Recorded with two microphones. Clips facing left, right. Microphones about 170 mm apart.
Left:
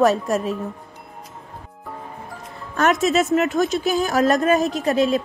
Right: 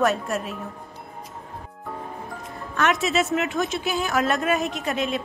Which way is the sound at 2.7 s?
40° left (ahead or behind).